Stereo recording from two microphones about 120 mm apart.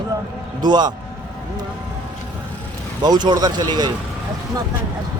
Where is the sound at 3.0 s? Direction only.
40° right (ahead or behind).